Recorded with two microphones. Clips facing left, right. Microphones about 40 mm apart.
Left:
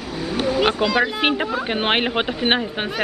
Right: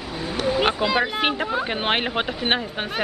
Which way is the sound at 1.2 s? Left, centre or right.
Centre.